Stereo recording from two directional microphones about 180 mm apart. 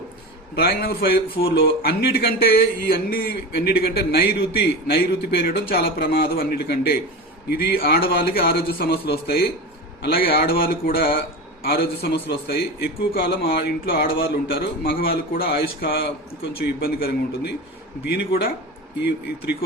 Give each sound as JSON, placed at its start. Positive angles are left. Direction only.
{"t": 0.5, "sound": "a man's voice", "side_deg": 60}